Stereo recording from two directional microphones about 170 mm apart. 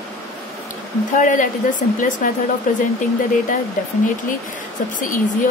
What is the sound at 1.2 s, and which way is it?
Speech, 50° left (ahead or behind).